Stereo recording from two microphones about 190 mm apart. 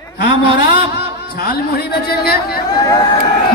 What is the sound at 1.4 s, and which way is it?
A man's voice, 55° left (ahead or behind).